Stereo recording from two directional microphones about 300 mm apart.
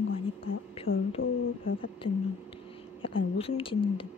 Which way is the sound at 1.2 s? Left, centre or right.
Left.